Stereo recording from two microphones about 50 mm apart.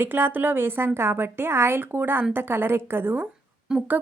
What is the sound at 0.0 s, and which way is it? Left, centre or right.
A woman's voice, right.